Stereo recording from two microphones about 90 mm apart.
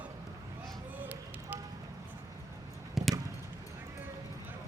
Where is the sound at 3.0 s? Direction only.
5° right (ahead or behind).